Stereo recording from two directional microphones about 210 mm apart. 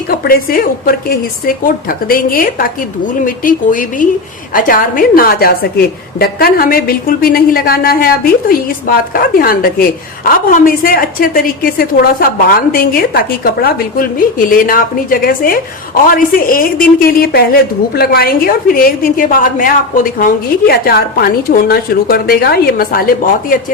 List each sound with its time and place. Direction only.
0.1 s a woman's voice: 45° left (ahead or behind)